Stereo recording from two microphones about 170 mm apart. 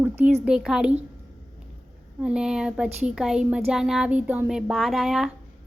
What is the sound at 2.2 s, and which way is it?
A woman's voice, 5° right (ahead or behind).